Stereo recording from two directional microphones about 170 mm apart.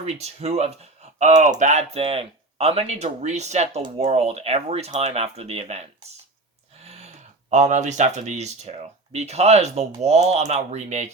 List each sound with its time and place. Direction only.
0.0 s speech: 40° right (ahead or behind)
6.8 s a sound: 40° right (ahead or behind)
7.5 s speech: 45° right (ahead or behind)